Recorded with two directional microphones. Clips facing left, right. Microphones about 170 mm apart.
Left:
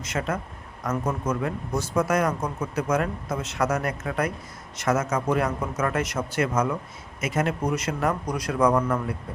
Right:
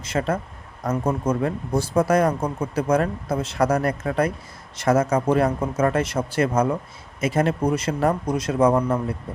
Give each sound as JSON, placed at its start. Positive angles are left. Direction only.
{"t": 0.0, "sound": "a man's voice", "side_deg": -30}